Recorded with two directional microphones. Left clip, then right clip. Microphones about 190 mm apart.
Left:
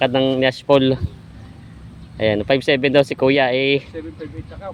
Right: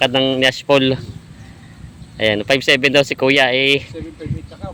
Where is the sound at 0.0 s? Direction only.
Centre (ahead or behind).